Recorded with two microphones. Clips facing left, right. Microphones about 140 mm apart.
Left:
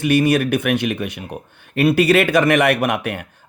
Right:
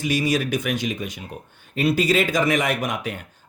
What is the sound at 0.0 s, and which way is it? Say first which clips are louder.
Speech: left 6 dB; 60° left (ahead or behind).